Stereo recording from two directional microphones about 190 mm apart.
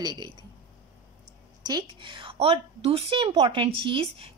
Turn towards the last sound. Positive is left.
turn(degrees=-30)  # may be behind; listen again after turning